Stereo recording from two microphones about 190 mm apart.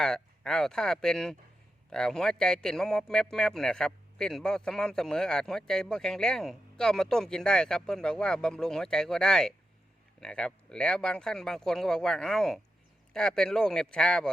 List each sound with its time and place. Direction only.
0.0 s a man's voice: 5° left (ahead or behind)